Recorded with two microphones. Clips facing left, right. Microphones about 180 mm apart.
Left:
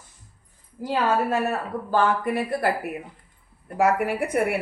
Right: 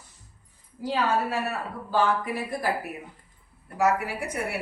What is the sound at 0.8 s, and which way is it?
Speech, 50° left (ahead or behind).